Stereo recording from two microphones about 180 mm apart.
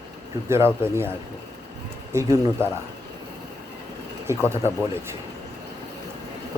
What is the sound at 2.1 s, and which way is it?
Speech, 15° right (ahead or behind).